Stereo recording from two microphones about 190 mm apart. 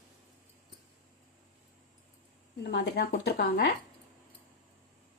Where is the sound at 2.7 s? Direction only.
60° left (ahead or behind).